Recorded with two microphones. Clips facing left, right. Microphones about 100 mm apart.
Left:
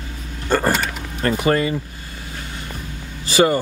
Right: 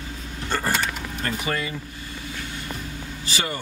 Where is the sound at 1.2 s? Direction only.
50° left (ahead or behind).